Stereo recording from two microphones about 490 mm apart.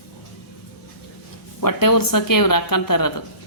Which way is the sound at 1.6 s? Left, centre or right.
Left.